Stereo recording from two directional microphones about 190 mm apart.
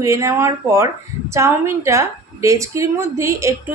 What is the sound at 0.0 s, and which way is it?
A woman's voice, 15° right (ahead or behind).